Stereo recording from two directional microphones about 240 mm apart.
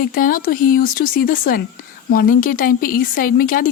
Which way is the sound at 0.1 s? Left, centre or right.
Left.